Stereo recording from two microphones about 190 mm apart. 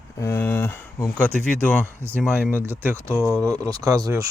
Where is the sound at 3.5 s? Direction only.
20° right (ahead or behind).